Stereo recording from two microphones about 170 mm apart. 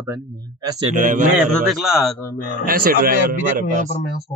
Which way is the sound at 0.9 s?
50° right (ahead or behind).